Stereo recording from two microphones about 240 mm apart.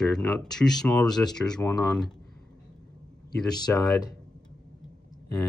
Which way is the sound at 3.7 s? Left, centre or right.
Centre.